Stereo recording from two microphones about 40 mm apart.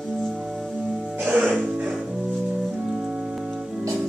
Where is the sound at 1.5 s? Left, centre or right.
Right.